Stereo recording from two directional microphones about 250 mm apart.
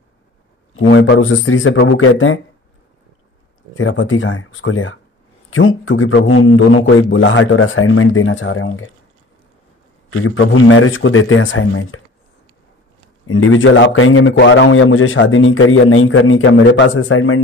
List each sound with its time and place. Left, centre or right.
0.7 s a man's voice: left
3.7 s a man's voice: left
10.2 s a man's voice: left
13.3 s a man's voice: left